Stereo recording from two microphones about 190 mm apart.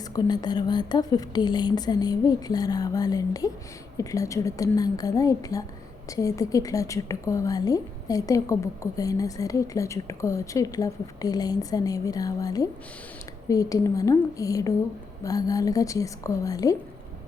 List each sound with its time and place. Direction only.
0.0 s a woman's voice: 20° left (ahead or behind)